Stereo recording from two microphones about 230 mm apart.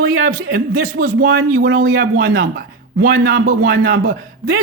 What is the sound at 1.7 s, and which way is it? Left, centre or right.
Speech, right.